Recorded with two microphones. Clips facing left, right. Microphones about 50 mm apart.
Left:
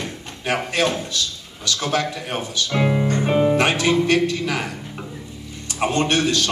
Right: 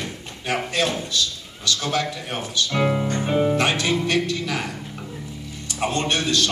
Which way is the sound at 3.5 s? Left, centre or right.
Left.